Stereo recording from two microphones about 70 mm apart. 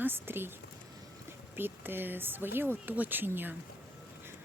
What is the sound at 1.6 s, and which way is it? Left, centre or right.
Speech, right.